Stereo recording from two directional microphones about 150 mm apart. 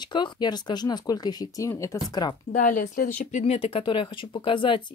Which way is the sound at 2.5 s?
65° left (ahead or behind).